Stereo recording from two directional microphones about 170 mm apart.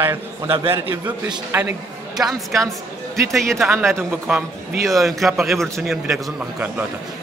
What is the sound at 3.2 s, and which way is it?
A man's voice, centre (ahead or behind).